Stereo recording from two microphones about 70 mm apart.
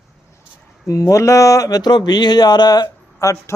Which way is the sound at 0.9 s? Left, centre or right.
Left.